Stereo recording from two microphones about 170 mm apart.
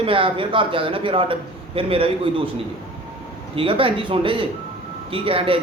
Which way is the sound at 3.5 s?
30° right (ahead or behind).